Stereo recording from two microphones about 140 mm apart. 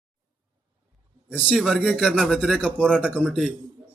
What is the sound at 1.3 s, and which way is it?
Speech, 10° left (ahead or behind).